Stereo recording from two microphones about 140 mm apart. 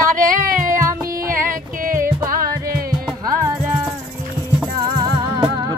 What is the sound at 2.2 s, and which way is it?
Music, 90° right.